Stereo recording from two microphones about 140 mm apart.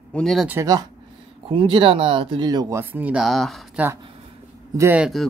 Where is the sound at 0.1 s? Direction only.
5° left (ahead or behind).